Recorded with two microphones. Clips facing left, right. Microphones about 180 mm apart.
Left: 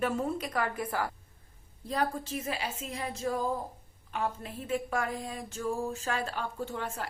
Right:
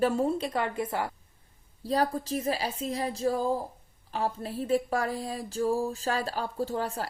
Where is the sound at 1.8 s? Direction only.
35° right (ahead or behind).